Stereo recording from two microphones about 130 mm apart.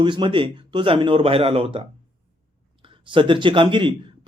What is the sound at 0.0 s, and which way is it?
Speech, 40° right (ahead or behind).